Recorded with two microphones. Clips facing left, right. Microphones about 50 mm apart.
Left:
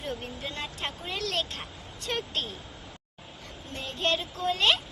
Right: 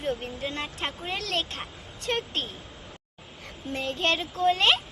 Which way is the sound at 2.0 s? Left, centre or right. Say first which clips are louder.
Right 3 dB; right.